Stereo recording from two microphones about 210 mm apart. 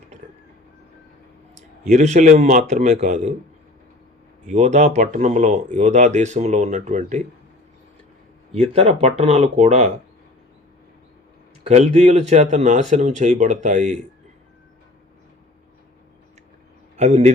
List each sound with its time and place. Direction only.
1.9 s speech: 35° right (ahead or behind)
4.5 s speech: 30° right (ahead or behind)
8.5 s speech: 30° right (ahead or behind)
11.6 s speech: 35° right (ahead or behind)
17.0 s speech: 30° right (ahead or behind)